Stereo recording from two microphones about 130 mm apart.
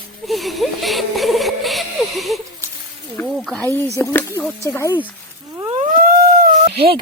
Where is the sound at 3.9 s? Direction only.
20° left (ahead or behind).